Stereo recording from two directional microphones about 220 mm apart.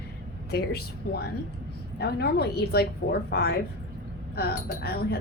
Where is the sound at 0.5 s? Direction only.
45° left (ahead or behind).